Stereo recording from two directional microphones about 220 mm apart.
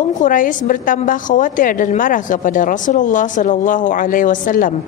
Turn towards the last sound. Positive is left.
turn(degrees=40)  # may be behind; listen again after turning